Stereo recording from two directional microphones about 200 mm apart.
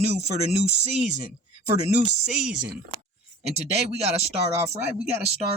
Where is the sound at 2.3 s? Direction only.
5° right (ahead or behind).